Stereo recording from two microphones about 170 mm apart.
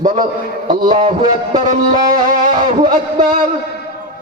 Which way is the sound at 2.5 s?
30° right (ahead or behind).